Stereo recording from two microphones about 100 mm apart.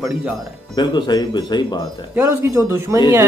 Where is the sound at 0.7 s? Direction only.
45° left (ahead or behind).